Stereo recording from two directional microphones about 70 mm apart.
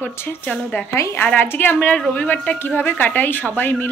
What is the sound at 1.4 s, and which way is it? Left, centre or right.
A woman's voice, left.